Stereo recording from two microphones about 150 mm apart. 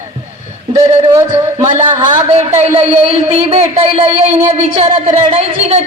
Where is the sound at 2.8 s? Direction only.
40° right (ahead or behind).